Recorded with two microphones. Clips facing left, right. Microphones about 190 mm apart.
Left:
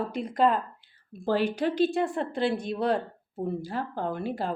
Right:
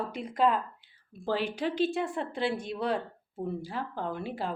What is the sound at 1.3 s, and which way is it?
A woman's voice, 45° left (ahead or behind).